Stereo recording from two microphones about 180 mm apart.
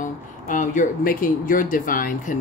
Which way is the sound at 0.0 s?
45° left (ahead or behind).